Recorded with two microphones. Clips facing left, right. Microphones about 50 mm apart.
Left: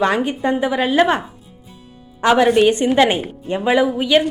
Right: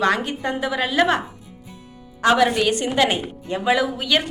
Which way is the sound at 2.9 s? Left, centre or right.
Centre.